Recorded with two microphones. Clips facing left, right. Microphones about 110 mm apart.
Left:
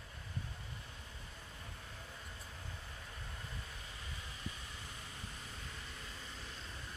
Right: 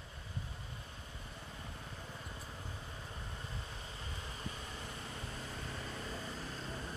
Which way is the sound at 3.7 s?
30° right (ahead or behind).